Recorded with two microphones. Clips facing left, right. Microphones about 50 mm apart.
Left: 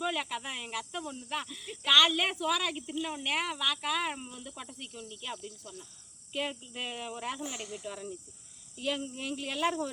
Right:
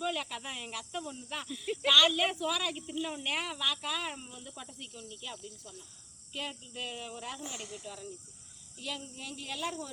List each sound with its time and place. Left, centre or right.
0.0 s speech: centre
4.3 s speech: centre
4.5 s speech: centre
6.3 s speech: left
8.8 s speech: left